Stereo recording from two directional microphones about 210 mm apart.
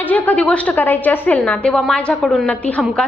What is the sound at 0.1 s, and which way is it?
A woman's voice, 5° left (ahead or behind).